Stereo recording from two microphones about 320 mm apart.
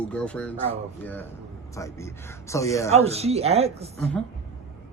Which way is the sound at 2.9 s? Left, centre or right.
Centre.